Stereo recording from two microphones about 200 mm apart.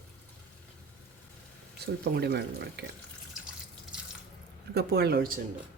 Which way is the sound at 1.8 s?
55° right (ahead or behind).